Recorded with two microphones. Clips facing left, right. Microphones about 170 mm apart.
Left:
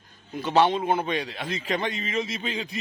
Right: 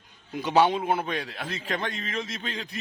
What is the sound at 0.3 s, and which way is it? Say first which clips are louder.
A man's voice: left 1 dB; 10° right (ahead or behind).